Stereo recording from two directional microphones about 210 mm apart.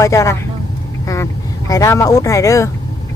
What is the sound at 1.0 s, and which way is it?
Vehicle, 15° left (ahead or behind).